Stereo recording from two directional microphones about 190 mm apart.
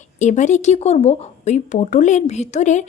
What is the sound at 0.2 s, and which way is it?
Speech, 40° left (ahead or behind).